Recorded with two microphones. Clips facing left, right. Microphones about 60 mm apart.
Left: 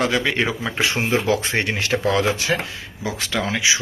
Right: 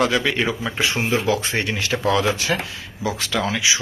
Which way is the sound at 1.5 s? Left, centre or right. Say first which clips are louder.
Left 2 dB; left.